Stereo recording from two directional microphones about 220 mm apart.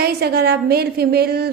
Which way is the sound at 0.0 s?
45° right (ahead or behind).